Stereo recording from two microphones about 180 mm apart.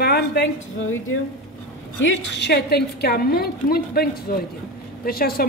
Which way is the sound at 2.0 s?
70° left (ahead or behind).